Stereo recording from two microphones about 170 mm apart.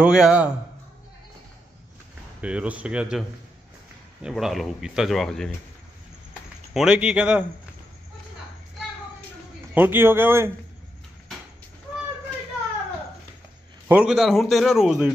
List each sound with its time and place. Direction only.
0.0 s speech: 5° right (ahead or behind)
2.4 s speech: 5° right (ahead or behind)
6.7 s speech: 5° right (ahead or behind)
9.8 s speech: 10° right (ahead or behind)
13.8 s speech: 5° right (ahead or behind)